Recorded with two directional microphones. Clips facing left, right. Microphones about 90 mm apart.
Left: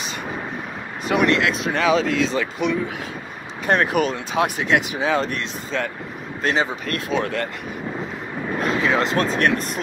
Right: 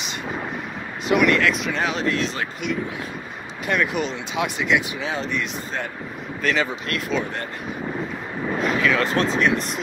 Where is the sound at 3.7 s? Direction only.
40° left (ahead or behind).